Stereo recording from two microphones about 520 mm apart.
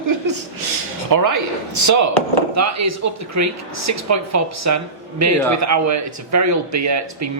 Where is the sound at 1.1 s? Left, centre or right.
Right.